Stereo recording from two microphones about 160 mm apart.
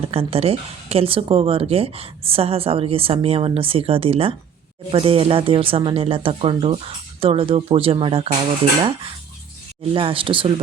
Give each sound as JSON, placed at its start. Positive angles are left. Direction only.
{"t": 0.1, "sound": "speech", "side_deg": -40}
{"t": 9.9, "sound": "speech", "side_deg": -35}